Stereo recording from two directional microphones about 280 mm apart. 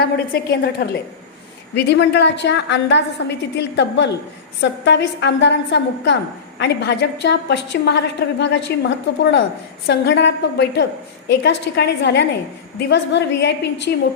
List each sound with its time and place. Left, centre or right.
0.0 s a woman's voice: left